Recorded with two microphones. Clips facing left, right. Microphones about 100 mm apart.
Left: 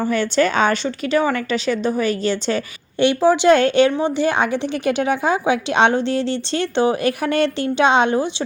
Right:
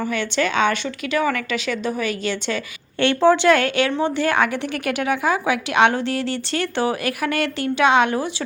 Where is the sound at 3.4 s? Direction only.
30° left (ahead or behind).